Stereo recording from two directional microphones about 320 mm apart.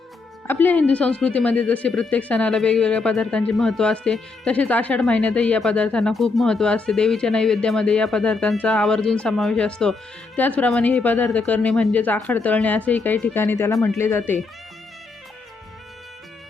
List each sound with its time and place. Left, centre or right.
0.4 s speech: centre